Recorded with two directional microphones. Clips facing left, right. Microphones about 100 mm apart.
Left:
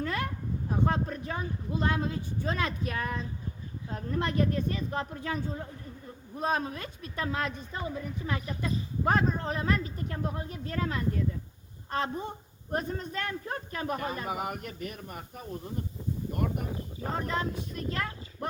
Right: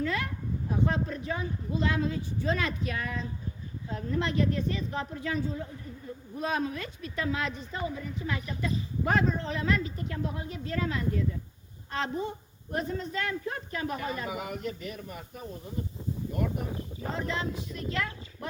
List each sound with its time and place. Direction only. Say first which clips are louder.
0.0 s a sound: right 1 dB; 45° left (ahead or behind)
0.9 s speech: right 1 dB; 45° left (ahead or behind)
16.3 s speech: right 1 dB; 50° left (ahead or behind)